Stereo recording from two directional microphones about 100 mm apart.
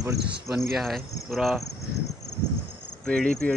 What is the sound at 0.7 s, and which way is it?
Cricket, centre (ahead or behind).